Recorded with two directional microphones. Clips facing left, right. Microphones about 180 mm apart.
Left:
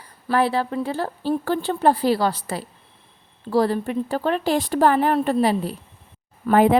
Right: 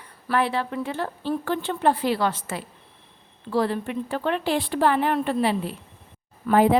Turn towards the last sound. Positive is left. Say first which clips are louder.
# left 2 dB
turn(degrees=55)  # may be behind; listen again after turning